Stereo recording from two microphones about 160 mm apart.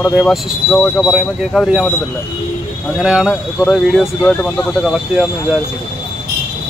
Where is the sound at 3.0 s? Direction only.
5° right (ahead or behind).